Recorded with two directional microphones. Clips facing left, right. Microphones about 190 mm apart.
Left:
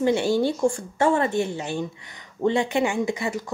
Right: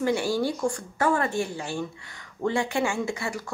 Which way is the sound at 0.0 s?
25° left (ahead or behind).